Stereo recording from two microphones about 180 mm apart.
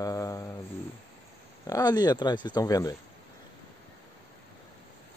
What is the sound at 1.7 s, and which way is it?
Speech, 20° left (ahead or behind).